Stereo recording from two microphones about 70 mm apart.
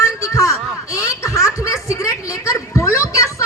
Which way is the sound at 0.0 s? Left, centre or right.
Left.